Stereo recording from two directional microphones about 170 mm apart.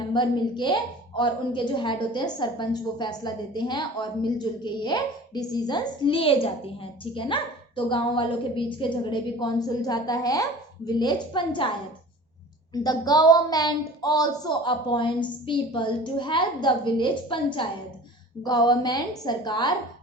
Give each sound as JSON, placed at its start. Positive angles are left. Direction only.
{"t": 0.1, "sound": "a woman's voice", "side_deg": 30}
{"t": 12.7, "sound": "a woman's voice", "side_deg": 25}